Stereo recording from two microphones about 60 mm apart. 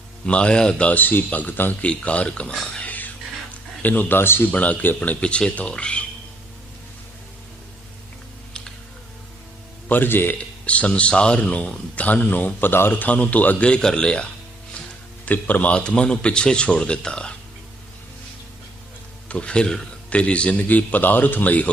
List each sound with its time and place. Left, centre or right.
0.3 s speech: centre
2.8 s a sound: left
3.8 s speech: left
4.5 s speech: left
9.9 s speech: left
10.7 s speech: left
13.7 s a man's voice: centre
15.2 s a man's voice: left
19.3 s speech: centre